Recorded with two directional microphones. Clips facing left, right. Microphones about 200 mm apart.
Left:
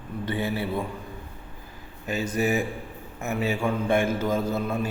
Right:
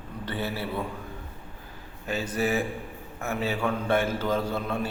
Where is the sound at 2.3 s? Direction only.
10° left (ahead or behind).